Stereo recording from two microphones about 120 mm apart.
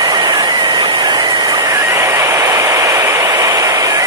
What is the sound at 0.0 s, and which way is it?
Vehicle, 35° right (ahead or behind).